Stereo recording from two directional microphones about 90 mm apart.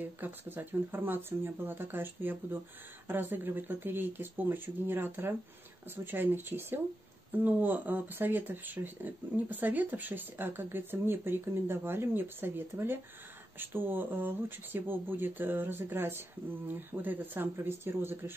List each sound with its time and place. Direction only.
0.0 s speech: 20° right (ahead or behind)